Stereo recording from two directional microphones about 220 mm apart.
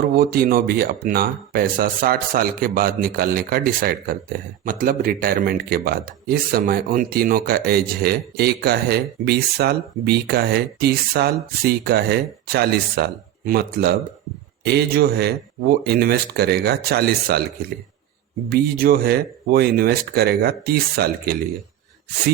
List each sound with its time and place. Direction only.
0.2 s speech: 40° right (ahead or behind)
18.4 s speech: 45° right (ahead or behind)